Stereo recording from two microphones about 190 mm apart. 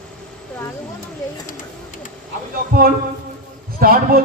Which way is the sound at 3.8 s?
50° right (ahead or behind).